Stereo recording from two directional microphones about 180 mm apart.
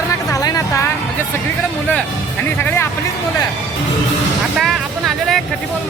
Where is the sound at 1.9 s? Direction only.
10° left (ahead or behind).